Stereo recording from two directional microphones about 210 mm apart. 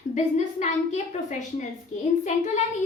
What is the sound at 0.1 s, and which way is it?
A woman's voice, 35° left (ahead or behind).